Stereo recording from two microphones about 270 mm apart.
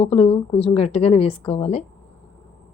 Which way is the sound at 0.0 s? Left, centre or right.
Left.